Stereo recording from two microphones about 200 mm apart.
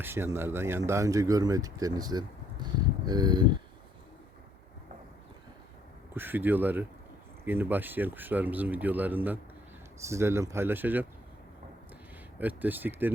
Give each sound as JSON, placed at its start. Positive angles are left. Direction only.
{"t": 0.0, "sound": "speech", "side_deg": -10}
{"t": 6.1, "sound": "speech", "side_deg": -10}
{"t": 12.4, "sound": "speech", "side_deg": -10}